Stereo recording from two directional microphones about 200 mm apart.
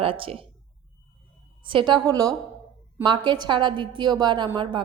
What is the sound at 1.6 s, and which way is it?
A woman's voice, 25° right (ahead or behind).